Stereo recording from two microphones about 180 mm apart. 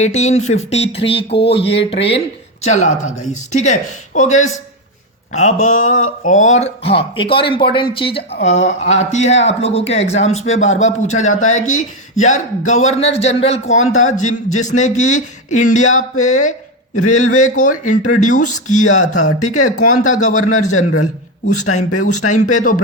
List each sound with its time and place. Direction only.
0.0 s speech: 40° left (ahead or behind)
21.8 s speech: 45° left (ahead or behind)